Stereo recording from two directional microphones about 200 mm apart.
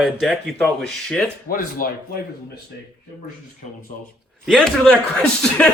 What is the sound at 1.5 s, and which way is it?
Speech, 45° left (ahead or behind).